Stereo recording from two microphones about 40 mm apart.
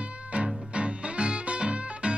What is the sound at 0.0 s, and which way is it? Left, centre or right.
Music, right.